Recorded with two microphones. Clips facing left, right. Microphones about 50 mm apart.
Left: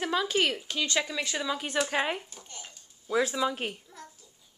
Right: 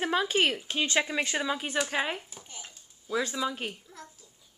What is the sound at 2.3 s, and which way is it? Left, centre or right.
Babbling, centre.